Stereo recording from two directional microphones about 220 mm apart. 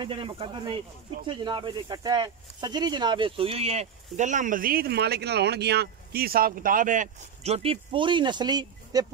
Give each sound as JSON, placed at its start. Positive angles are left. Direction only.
{"t": 0.0, "sound": "speech", "side_deg": -25}